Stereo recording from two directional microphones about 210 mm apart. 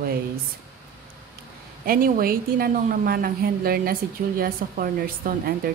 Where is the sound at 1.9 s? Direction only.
45° right (ahead or behind).